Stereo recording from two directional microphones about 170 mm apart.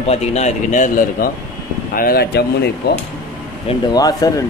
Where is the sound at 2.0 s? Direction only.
65° left (ahead or behind).